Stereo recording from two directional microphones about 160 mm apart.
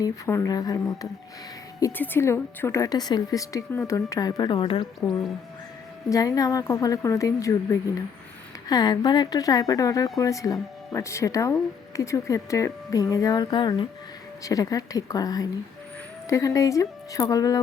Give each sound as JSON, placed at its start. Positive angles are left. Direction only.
{"t": 0.0, "sound": "a woman's voice", "side_deg": 20}
{"t": 6.1, "sound": "a woman's voice", "side_deg": 20}